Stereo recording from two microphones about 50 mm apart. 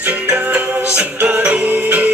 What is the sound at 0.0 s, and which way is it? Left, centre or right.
Music, right.